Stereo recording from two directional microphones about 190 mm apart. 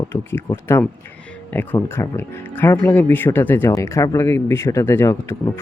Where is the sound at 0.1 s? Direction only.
10° left (ahead or behind).